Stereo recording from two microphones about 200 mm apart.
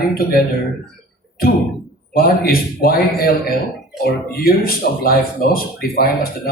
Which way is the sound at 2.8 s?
50° left (ahead or behind).